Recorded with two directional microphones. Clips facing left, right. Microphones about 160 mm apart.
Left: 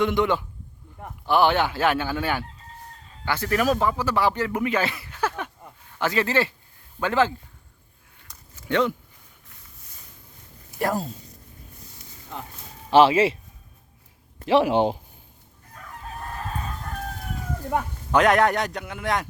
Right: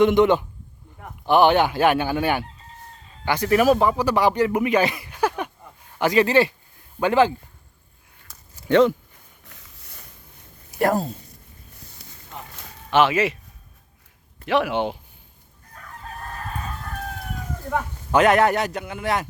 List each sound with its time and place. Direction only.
0.0 s a man's voice: 20° right (ahead or behind)
8.5 s a sound: 35° right (ahead or behind)
9.5 s a sound: 70° right (ahead or behind)
10.8 s speech: 60° right (ahead or behind)
12.9 s speech: 30° left (ahead or behind)
18.1 s a man's voice: 5° right (ahead or behind)